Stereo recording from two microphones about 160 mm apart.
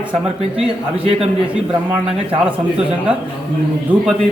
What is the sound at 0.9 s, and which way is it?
Speech, 35° right (ahead or behind).